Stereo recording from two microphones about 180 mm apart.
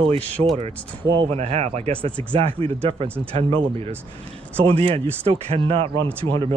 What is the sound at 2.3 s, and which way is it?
Speech, 30° right (ahead or behind).